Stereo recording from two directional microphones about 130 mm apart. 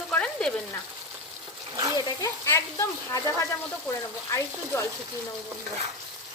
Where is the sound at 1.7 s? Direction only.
25° right (ahead or behind).